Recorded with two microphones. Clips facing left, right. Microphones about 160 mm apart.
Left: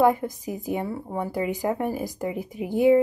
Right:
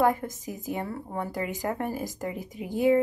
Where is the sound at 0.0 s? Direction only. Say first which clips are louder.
Left 4 dB; 20° left (ahead or behind).